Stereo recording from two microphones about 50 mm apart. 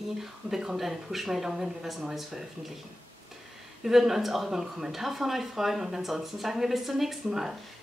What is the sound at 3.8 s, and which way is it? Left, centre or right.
Speech, centre.